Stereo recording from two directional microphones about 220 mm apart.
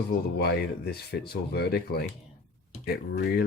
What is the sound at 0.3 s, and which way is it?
Speech, 45° left (ahead or behind).